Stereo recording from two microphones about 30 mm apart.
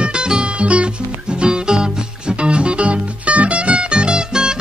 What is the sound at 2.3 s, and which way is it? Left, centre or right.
Music, right.